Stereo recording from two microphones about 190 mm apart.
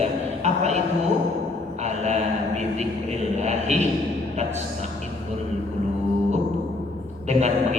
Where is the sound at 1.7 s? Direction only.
35° right (ahead or behind).